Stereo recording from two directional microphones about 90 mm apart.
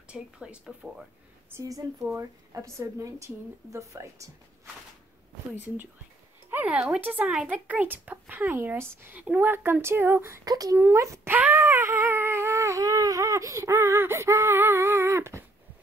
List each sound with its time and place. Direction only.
0.1 s speech: 10° right (ahead or behind)
2.1 s speech: 30° right (ahead or behind)
6.5 s a sound: 15° right (ahead or behind)
7.0 s speech: 20° right (ahead or behind)
10.4 s speech: 45° right (ahead or behind)
10.8 s speech: 30° right (ahead or behind)
11.3 s wail: 20° right (ahead or behind)
11.6 s a sound: 30° right (ahead or behind)